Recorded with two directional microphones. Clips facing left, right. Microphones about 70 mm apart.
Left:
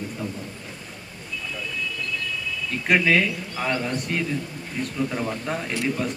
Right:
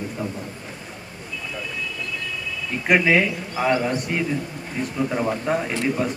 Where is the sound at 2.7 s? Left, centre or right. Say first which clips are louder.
Right 2 dB; centre.